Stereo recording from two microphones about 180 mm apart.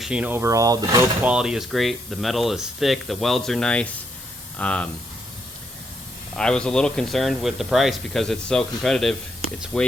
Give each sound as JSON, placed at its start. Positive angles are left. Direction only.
{"t": 0.0, "sound": "speech", "side_deg": -5}
{"t": 1.2, "sound": "speech", "side_deg": -5}
{"t": 6.3, "sound": "speech", "side_deg": 5}